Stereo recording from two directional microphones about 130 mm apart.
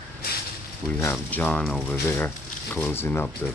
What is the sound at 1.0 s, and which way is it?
Speech, 10° left (ahead or behind).